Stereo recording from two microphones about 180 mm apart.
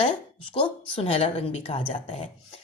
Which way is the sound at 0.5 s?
30° left (ahead or behind).